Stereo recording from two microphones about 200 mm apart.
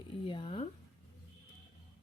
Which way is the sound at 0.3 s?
25° left (ahead or behind).